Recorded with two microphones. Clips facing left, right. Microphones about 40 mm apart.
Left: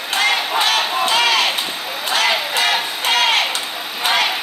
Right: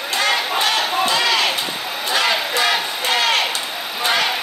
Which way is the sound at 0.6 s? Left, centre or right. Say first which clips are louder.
Left 1 dB; left.